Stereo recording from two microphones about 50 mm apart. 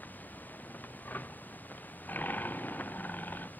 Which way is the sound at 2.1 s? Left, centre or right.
Left.